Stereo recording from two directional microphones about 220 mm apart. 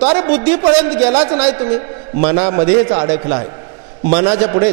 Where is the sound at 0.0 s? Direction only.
25° right (ahead or behind).